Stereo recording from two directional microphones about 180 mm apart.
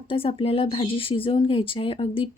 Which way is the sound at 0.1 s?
30° left (ahead or behind).